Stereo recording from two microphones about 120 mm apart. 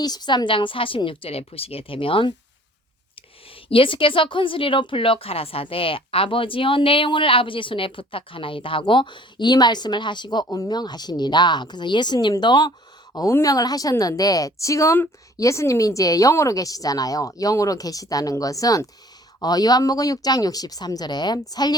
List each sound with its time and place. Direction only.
0.0 s a woman's voice: 35° left (ahead or behind)